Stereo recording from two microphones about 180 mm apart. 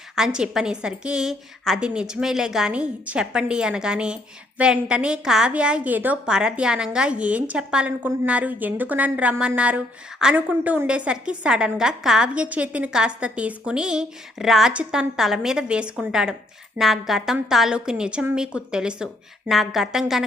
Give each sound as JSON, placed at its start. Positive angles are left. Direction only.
{"t": 0.3, "sound": "a woman's voice", "side_deg": -5}